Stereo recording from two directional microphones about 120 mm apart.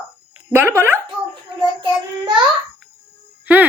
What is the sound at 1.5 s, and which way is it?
Child singing, 40° right (ahead or behind).